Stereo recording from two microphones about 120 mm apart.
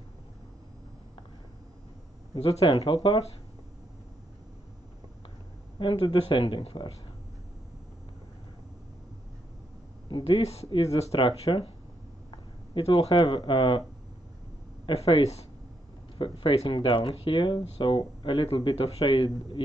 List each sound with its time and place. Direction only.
2.3 s speech: 55° left (ahead or behind)
5.8 s speech: 45° left (ahead or behind)
10.0 s speech: 50° left (ahead or behind)
11.1 s speech: 45° left (ahead or behind)
12.3 s a sound: 50° left (ahead or behind)
13.4 s speech: 45° left (ahead or behind)
15.0 s speech: 60° left (ahead or behind)
16.2 s speech: 45° left (ahead or behind)